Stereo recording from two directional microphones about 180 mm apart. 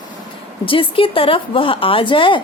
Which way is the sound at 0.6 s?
30° left (ahead or behind).